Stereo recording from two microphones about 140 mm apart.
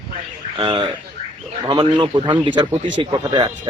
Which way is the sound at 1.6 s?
35° right (ahead or behind).